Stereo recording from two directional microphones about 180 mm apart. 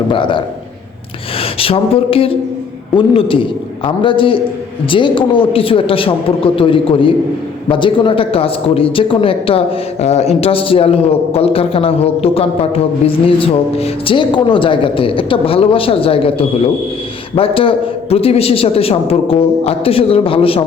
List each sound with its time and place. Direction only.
0.1 s a woman's voice: 25° left (ahead or behind)